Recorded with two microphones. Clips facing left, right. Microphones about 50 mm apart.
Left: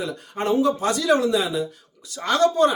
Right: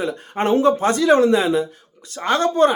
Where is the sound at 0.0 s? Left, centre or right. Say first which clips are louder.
Right 5 dB; right.